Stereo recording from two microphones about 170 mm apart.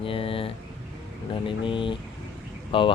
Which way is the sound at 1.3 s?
30° left (ahead or behind).